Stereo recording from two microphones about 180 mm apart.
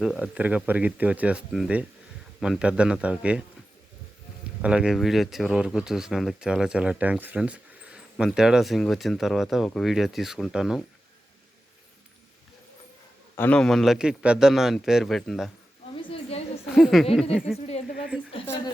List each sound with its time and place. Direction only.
0.0 s speech: 5° right (ahead or behind)
4.6 s speech: 5° right (ahead or behind)
13.3 s speech: 10° left (ahead or behind)
16.0 s a sound: 30° left (ahead or behind)
16.6 s speech: centre (ahead or behind)